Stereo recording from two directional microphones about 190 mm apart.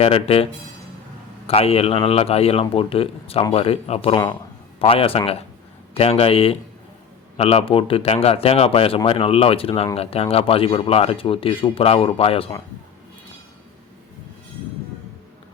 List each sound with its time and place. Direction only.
0.0 s a man's voice: 30° left (ahead or behind)
1.5 s a man's voice: 30° left (ahead or behind)